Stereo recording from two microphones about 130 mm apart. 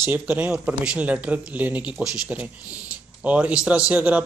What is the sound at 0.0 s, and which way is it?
A man's voice, 10° right (ahead or behind).